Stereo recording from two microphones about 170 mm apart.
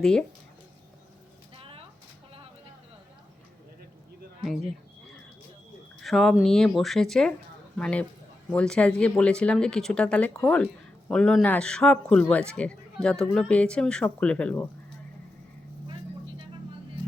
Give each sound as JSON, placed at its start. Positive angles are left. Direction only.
{"t": 0.0, "sound": "a man's voice", "side_deg": 5}
{"t": 1.5, "sound": "a sound", "side_deg": -35}
{"t": 6.0, "sound": "a man's voice", "side_deg": 0}